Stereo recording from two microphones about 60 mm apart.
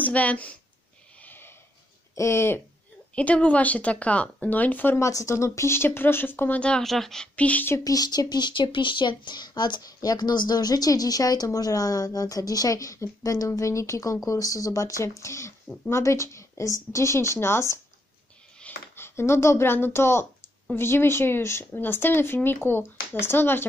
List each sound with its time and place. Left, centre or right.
0.0 s speech: left
1.2 s snort: left
2.1 s speech: left
3.2 s speech: left
4.9 s speech: left
6.8 s a woman's voice: centre
7.3 s speech: left
7.8 s speech: left
9.8 s a woman's voice: left
13.5 s speech: left
18.9 s speech: left